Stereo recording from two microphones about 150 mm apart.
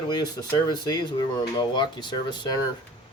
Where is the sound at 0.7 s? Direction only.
25° left (ahead or behind).